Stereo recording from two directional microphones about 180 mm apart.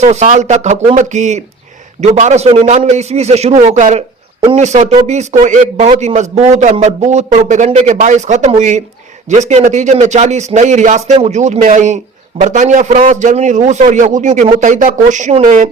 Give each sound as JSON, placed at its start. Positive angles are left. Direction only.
{"t": 0.0, "sound": "a man's voice", "side_deg": -40}